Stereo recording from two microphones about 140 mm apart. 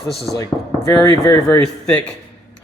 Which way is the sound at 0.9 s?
25° left (ahead or behind).